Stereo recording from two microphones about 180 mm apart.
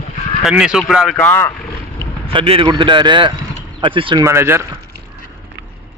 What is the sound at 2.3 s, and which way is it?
Speech, 30° right (ahead or behind).